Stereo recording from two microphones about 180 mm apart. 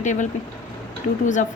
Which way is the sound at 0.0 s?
45° left (ahead or behind).